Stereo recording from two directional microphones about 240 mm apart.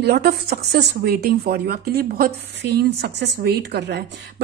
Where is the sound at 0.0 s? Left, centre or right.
Right.